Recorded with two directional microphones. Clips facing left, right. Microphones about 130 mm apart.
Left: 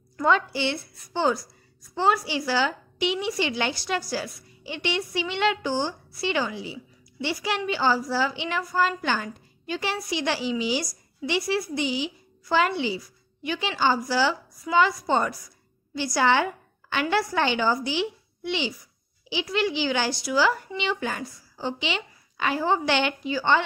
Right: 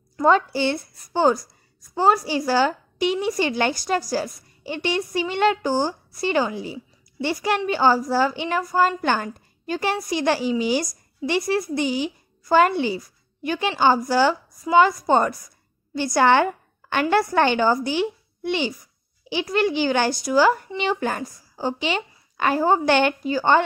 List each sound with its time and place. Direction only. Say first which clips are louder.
0.2 s a woman's voice: right 5 dB; 40° right (ahead or behind)